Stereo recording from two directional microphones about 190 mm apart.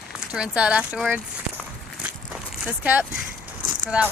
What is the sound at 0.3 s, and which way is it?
Speech, 5° right (ahead or behind).